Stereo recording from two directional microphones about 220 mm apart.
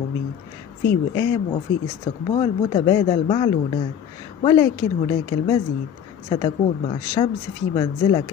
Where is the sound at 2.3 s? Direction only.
25° left (ahead or behind).